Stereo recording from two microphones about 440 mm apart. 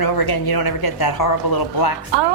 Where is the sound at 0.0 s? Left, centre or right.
Left.